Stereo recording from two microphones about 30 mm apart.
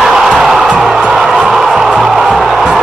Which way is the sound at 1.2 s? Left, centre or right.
Centre.